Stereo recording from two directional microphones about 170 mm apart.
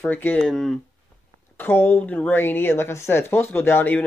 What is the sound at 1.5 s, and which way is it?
Speech, 15° left (ahead or behind).